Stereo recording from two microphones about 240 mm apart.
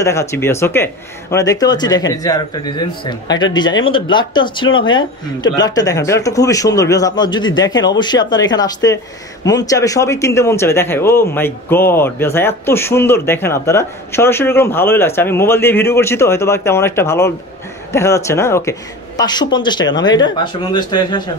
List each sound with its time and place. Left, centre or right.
0.0 s speech: centre